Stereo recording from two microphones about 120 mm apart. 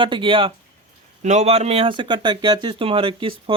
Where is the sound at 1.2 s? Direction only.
75° right (ahead or behind).